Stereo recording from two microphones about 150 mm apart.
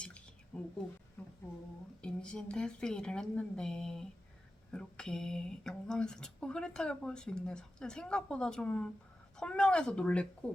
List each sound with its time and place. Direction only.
0.0 s drip: 5° left (ahead or behind)
2.0 s speech: 5° left (ahead or behind)